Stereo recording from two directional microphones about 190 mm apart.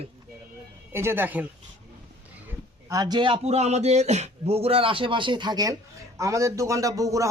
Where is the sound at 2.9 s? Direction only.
20° right (ahead or behind).